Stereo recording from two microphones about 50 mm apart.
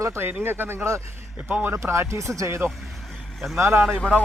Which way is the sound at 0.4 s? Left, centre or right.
Right.